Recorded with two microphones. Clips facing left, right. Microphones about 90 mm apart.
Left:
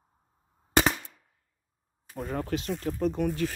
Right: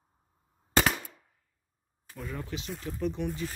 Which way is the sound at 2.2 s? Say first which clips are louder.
Left 7 dB; 50° left (ahead or behind).